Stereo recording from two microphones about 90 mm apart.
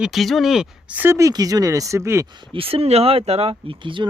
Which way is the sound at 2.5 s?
90° right.